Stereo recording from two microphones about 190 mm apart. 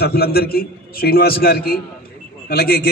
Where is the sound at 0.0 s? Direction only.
55° left (ahead or behind).